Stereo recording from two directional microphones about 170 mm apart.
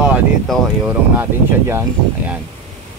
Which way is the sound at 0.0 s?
10° right (ahead or behind).